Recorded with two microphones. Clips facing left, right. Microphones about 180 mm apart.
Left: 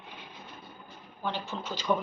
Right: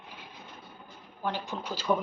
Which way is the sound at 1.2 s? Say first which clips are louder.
Right 1 dB; 10° right (ahead or behind).